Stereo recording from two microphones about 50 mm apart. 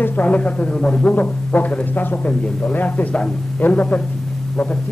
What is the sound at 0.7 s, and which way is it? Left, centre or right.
Speech, centre.